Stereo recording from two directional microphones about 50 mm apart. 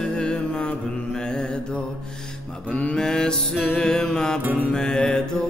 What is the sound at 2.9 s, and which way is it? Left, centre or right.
Music, centre.